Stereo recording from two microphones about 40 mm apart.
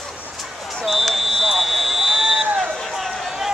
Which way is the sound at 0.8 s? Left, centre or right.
Centre.